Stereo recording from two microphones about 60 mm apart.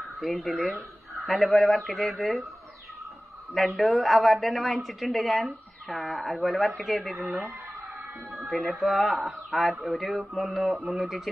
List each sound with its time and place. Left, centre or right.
0.2 s a woman's voice: centre
3.5 s a woman's voice: centre
8.3 s a sound: centre
8.7 s a woman's voice: centre